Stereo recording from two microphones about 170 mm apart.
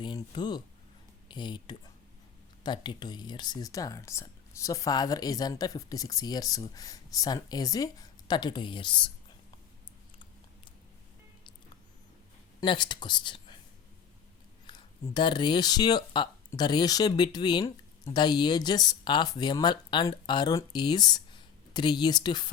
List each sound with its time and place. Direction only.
0.0 s speech: 25° left (ahead or behind)
12.5 s speech: 25° left (ahead or behind)
14.7 s speech: 25° left (ahead or behind)